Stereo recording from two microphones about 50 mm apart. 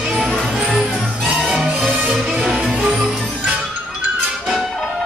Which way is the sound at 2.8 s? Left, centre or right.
Right.